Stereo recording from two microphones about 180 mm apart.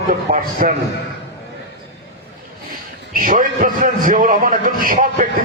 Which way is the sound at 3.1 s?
50° right (ahead or behind).